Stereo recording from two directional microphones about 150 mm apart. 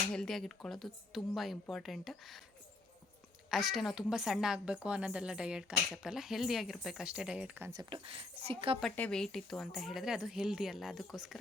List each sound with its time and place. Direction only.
0.1 s a woman's voice: 5° left (ahead or behind)
3.5 s a woman's voice: centre (ahead or behind)
7.7 s speech: 30° right (ahead or behind)
8.8 s a woman's voice: 5° left (ahead or behind)